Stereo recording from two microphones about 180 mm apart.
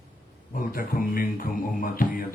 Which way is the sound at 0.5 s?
55° left (ahead or behind).